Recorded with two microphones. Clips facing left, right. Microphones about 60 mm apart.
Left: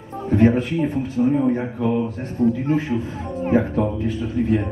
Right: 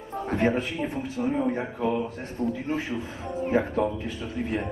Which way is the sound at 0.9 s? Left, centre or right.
Left.